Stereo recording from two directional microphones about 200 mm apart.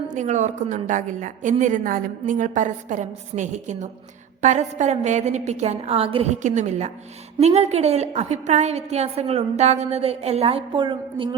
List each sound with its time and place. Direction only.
0.1 s a woman's voice: 35° right (ahead or behind)